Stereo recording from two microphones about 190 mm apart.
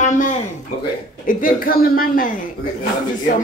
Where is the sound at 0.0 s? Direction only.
40° left (ahead or behind).